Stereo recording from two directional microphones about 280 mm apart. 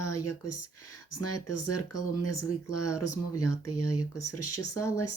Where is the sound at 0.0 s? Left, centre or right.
Left.